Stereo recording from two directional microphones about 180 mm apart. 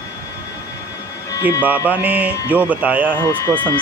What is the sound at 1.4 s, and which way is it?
Music, 10° right (ahead or behind).